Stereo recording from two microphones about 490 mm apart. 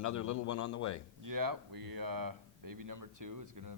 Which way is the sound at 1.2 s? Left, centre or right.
Right.